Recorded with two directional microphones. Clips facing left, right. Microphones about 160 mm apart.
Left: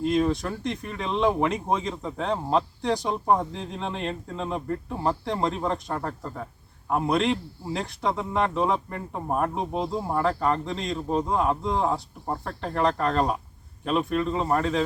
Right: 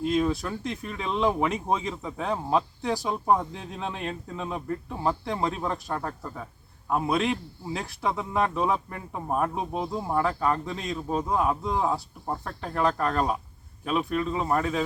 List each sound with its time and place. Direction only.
0.0 s a man's voice: centre (ahead or behind)